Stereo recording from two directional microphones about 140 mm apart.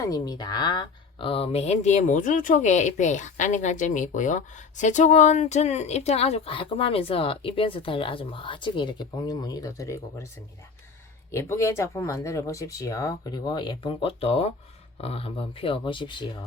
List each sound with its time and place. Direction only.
0.0 s speech: 25° left (ahead or behind)
11.3 s speech: 20° left (ahead or behind); by 16.3 s 35° left (ahead or behind)